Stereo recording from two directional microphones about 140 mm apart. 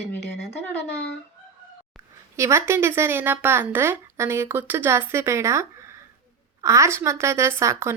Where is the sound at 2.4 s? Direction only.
20° right (ahead or behind).